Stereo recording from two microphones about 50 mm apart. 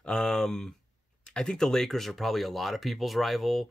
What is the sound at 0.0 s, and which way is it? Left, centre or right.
Speech, centre.